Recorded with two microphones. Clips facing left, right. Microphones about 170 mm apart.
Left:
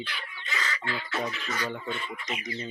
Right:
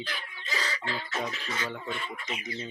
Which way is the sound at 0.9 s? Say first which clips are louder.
Left 3 dB; 40° right (ahead or behind).